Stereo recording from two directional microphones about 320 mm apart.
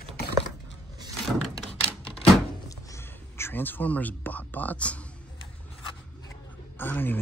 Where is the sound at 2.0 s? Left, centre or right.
Centre.